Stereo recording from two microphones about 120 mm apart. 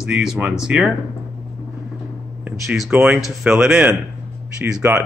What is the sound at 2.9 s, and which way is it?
A man's voice, 15° right (ahead or behind).